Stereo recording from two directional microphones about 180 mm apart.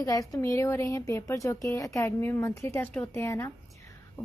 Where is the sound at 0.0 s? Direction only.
20° left (ahead or behind).